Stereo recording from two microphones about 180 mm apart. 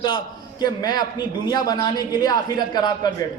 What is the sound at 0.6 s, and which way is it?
A man's voice, 20° left (ahead or behind).